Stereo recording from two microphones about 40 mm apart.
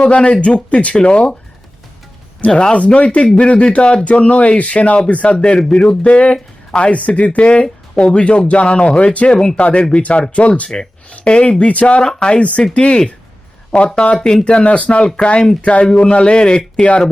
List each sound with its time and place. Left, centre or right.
0.0 s a man's voice: left
2.5 s a man's voice: left
9.3 s speech: centre
10.0 s a man's voice: left
10.7 s speech: centre
11.1 s a man's voice: left
12.0 s a man's voice: left